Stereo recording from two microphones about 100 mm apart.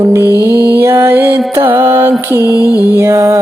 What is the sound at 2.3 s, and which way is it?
Mantra, 20° right (ahead or behind).